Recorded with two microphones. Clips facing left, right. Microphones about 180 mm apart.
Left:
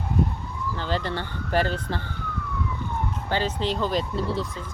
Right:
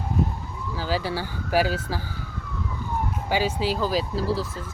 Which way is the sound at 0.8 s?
5° right (ahead or behind).